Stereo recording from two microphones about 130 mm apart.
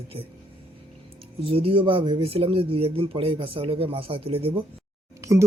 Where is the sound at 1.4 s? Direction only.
45° right (ahead or behind).